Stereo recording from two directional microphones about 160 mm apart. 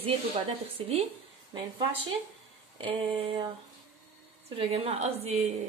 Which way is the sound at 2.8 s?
35° right (ahead or behind).